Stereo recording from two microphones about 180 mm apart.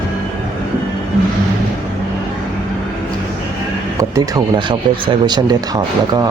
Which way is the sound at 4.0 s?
20° right (ahead or behind).